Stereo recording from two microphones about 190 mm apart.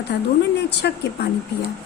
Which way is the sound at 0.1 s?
60° left (ahead or behind).